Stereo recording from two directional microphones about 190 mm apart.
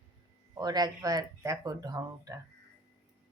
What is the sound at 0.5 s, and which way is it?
Speech, 20° right (ahead or behind).